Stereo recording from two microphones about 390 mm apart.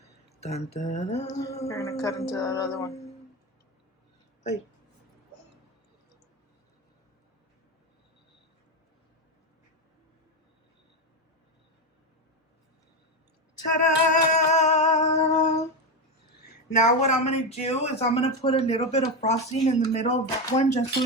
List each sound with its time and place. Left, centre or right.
0.3 s a sound: centre
0.8 s speech: centre
14.1 s humming: centre
16.4 s speech: centre